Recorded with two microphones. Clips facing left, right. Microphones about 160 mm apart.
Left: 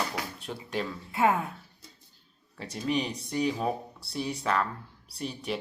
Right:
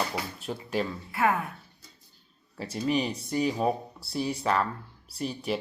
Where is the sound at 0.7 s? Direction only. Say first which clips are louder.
Right 3 dB; centre (ahead or behind).